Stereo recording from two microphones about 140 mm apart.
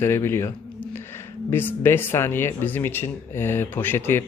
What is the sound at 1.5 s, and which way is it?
Speech, 15° left (ahead or behind).